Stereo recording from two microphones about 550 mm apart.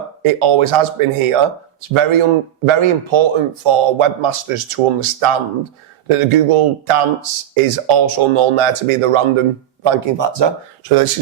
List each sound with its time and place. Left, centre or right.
0.2 s speech: right